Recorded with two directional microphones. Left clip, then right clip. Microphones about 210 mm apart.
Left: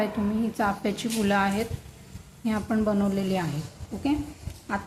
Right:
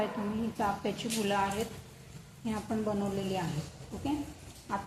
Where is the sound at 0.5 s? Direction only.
35° left (ahead or behind).